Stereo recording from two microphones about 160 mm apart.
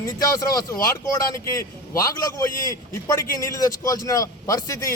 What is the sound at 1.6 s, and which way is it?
A man's voice, 20° left (ahead or behind).